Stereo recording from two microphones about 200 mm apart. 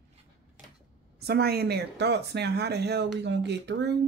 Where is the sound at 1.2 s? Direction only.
55° right (ahead or behind).